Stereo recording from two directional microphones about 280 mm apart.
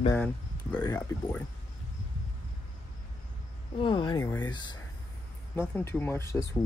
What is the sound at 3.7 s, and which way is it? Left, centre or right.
Speech, centre.